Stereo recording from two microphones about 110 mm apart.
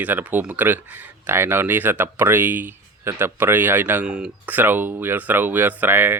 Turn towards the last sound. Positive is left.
turn(degrees=-20)  # may be behind; listen again after turning